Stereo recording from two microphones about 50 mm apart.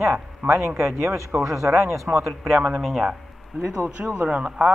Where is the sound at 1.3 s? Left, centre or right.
Right.